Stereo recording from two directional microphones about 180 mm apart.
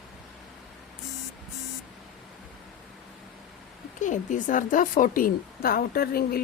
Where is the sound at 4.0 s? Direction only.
45° left (ahead or behind).